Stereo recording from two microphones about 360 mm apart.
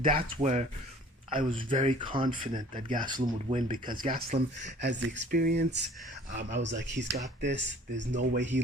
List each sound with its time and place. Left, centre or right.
0.0 s speech: right